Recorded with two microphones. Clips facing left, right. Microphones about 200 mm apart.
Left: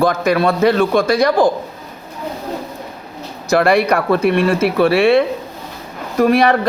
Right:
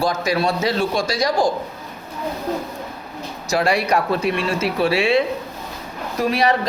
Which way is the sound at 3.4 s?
55° left (ahead or behind).